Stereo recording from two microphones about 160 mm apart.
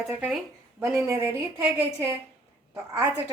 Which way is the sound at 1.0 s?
15° right (ahead or behind).